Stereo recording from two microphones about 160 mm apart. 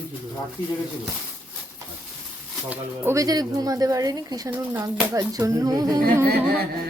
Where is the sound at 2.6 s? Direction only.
15° right (ahead or behind).